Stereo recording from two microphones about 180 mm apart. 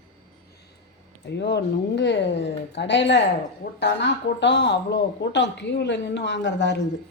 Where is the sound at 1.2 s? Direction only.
70° left (ahead or behind).